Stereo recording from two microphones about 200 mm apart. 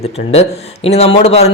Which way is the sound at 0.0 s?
30° left (ahead or behind).